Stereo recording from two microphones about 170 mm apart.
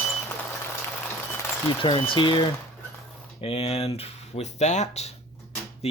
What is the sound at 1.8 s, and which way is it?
Speech, 30° left (ahead or behind).